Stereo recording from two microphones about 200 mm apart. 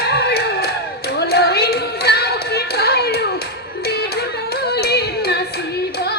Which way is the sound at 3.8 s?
50° left (ahead or behind).